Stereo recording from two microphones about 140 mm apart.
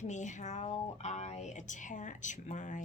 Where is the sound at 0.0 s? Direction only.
60° left (ahead or behind).